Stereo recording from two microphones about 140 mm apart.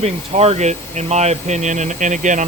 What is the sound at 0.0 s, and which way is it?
Speech, 50° right (ahead or behind).